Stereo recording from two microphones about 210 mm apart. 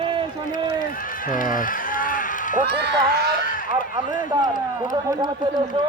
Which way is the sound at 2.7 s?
50° right (ahead or behind).